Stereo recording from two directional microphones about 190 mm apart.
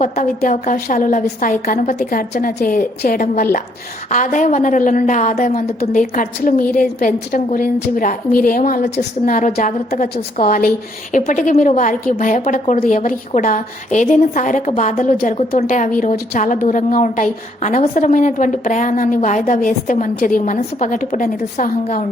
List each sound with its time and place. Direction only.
0.0 s a woman's voice: 40° left (ahead or behind)